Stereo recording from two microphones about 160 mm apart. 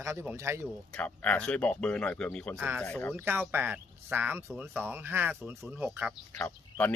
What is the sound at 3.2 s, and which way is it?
Speech, 10° right (ahead or behind).